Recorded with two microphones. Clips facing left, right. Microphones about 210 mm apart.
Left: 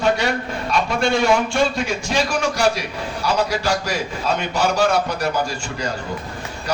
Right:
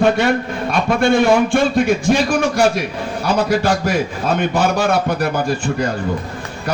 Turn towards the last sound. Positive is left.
turn(degrees=-55)  # may be behind; listen again after turning